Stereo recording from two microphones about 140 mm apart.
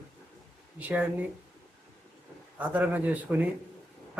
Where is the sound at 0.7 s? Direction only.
10° right (ahead or behind).